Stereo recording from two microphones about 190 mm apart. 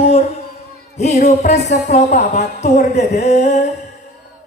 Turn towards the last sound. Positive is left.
turn(degrees=35)  # may be behind; listen again after turning